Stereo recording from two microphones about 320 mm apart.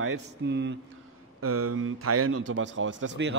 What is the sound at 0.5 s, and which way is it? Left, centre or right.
A man's voice, right.